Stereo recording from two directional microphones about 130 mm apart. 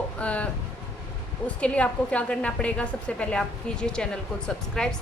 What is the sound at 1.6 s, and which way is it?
Speech, 10° left (ahead or behind).